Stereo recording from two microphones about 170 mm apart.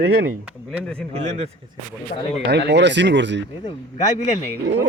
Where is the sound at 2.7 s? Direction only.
90° right.